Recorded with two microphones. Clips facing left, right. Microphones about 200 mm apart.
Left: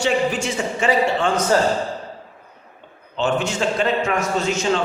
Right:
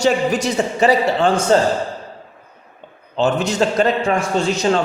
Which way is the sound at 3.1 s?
40° right (ahead or behind).